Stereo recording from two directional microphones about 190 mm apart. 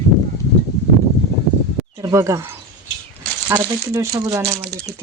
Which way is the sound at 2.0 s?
15° right (ahead or behind).